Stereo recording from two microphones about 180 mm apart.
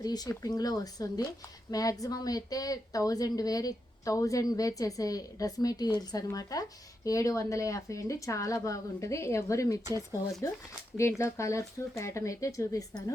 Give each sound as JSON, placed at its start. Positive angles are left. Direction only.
{"t": 0.0, "sound": "a woman's voice", "side_deg": 20}